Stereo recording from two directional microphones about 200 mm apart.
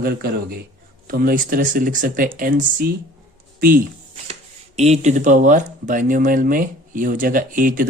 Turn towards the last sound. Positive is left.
turn(degrees=-45)  # may be behind; listen again after turning